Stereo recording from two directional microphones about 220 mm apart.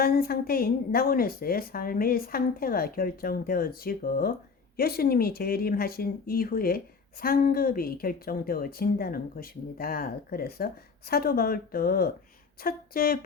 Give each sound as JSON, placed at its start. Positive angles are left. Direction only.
{"t": 0.0, "sound": "speech", "side_deg": 45}